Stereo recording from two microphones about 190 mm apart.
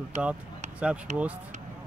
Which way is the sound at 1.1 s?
40° right (ahead or behind).